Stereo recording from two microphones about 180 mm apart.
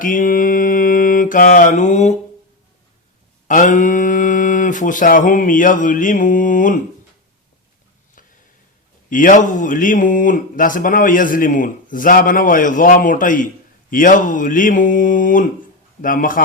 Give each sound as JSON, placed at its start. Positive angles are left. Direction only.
{"t": 0.0, "sound": "mantra", "side_deg": 50}
{"t": 3.4, "sound": "speech", "side_deg": 45}
{"t": 9.0, "sound": "speech", "side_deg": 45}